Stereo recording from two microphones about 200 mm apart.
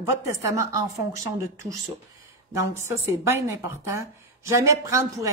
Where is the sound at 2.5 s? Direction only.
15° right (ahead or behind).